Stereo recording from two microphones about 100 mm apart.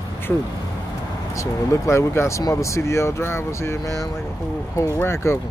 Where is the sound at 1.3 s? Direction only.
30° left (ahead or behind).